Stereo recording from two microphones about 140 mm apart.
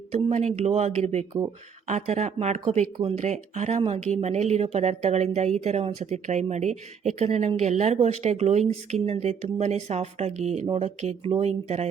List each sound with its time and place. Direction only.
0.1 s speech: 50° right (ahead or behind)
2.6 s speech: 45° right (ahead or behind)